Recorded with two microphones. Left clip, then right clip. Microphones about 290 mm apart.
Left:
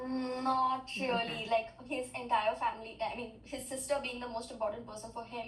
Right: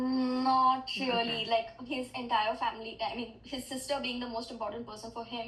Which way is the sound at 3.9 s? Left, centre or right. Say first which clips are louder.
Right 1 dB; right.